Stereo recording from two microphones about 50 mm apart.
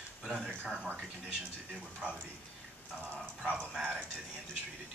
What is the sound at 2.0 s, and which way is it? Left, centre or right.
Speech, centre.